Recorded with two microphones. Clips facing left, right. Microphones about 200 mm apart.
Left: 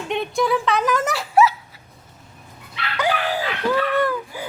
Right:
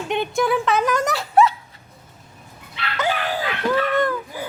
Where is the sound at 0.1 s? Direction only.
Centre (ahead or behind).